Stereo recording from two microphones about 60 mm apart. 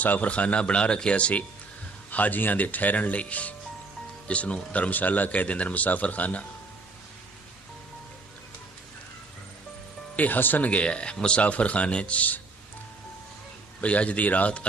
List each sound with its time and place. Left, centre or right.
0.0 s speech: left
10.2 s speech: left
13.8 s speech: left